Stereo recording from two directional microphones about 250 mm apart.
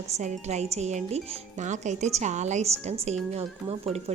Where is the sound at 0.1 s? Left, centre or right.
Right.